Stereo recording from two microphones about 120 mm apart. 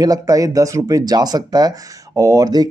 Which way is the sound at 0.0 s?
30° right (ahead or behind).